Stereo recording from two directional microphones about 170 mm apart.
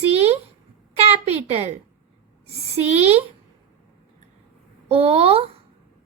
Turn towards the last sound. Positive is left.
turn(degrees=-35)  # may be behind; listen again after turning